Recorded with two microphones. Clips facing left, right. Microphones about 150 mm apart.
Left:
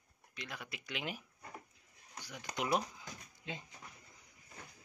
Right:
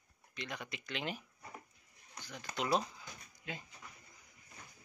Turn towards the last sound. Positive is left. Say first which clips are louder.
# left 1 dB
turn(degrees=20)  # may be behind; listen again after turning